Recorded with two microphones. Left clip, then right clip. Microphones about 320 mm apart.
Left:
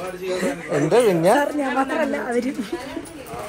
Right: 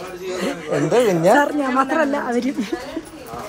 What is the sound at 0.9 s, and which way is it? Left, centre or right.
Speech, centre.